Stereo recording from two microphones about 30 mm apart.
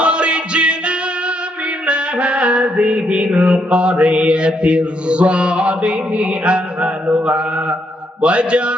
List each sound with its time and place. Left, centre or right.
0.0 s music: right
7.3 s mantra: right